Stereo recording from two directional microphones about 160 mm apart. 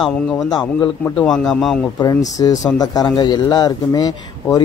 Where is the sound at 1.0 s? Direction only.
10° left (ahead or behind).